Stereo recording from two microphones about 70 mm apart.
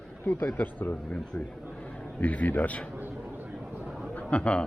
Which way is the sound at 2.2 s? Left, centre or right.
Left.